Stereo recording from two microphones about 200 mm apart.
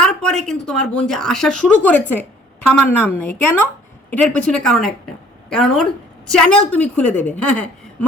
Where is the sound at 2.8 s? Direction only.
10° left (ahead or behind).